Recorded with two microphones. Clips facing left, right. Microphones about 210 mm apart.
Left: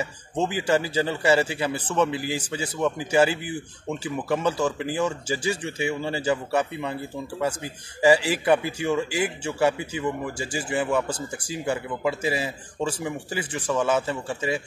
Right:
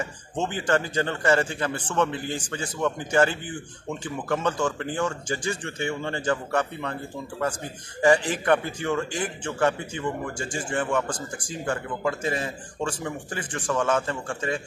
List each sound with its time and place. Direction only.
0.0 s a man's voice: 10° left (ahead or behind)